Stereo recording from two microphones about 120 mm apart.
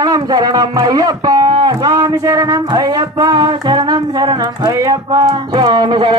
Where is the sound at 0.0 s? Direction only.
35° right (ahead or behind).